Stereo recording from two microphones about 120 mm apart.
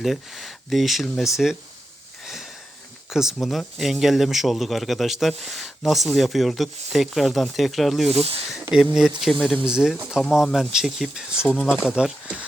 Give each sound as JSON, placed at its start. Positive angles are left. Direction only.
{"t": 0.0, "sound": "speech", "side_deg": 0}
{"t": 2.2, "sound": "sniff", "side_deg": 0}
{"t": 3.1, "sound": "speech", "side_deg": -5}
{"t": 8.1, "sound": "speech", "side_deg": -55}
{"t": 8.7, "sound": "speech", "side_deg": -5}
{"t": 11.4, "sound": "speech", "side_deg": 5}
{"t": 11.8, "sound": "speech", "side_deg": -5}